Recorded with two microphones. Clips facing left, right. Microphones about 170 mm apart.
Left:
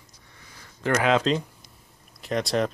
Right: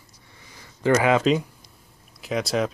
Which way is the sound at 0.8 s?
5° right (ahead or behind).